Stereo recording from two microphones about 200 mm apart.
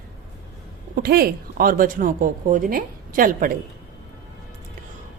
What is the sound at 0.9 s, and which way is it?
A woman's voice, 50° right (ahead or behind).